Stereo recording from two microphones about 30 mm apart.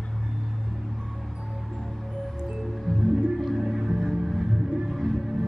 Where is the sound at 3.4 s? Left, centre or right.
Centre.